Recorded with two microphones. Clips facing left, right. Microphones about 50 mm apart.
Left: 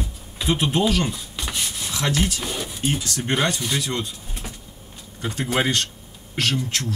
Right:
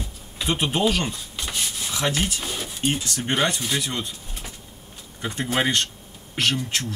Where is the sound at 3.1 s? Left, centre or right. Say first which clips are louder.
Left 1 dB; right.